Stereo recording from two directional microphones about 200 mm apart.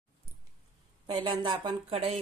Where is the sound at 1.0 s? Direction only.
25° right (ahead or behind).